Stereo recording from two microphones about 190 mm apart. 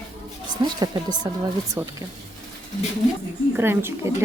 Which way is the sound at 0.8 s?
20° right (ahead or behind).